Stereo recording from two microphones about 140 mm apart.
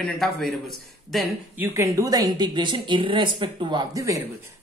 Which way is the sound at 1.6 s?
20° right (ahead or behind).